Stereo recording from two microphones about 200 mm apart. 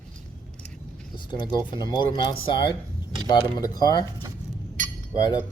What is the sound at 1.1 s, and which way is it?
Speech, 25° left (ahead or behind).